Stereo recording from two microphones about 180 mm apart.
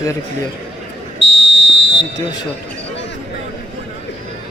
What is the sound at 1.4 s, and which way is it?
Smoke detector, 85° left.